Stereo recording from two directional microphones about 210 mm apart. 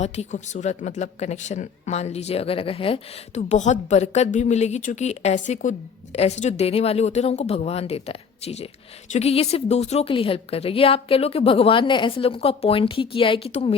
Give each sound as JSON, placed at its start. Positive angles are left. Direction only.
{"t": 0.0, "sound": "a woman's voice", "side_deg": 35}